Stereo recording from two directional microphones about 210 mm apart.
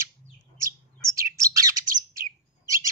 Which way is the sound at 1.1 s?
15° right (ahead or behind).